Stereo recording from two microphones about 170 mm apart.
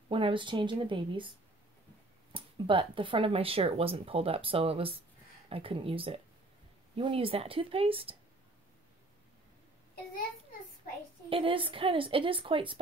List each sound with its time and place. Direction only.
0.1 s speech: 30° right (ahead or behind)
2.3 s speech: 30° right (ahead or behind)
11.2 s speech: 30° right (ahead or behind)